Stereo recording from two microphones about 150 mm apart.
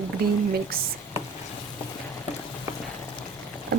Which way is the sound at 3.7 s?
90° right.